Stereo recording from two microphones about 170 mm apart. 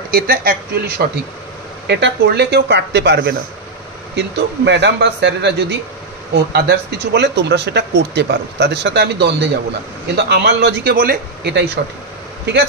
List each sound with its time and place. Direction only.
0.1 s speech: 60° right (ahead or behind)
1.9 s speech: 80° right
4.1 s a man's voice: 90° right
11.0 s speech: 65° right (ahead or behind); by 11.8 s 85° right